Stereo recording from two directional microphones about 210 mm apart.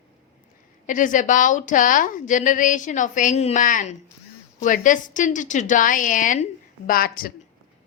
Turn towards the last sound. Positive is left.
turn(degrees=45)  # may be behind; listen again after turning